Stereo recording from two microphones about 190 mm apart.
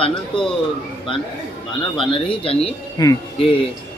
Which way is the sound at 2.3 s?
30° left (ahead or behind).